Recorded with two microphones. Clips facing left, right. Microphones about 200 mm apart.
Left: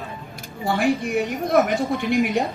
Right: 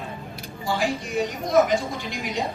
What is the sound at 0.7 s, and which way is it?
A man's voice, 60° left (ahead or behind).